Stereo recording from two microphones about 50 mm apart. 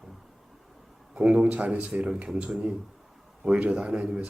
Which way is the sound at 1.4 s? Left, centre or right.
Right.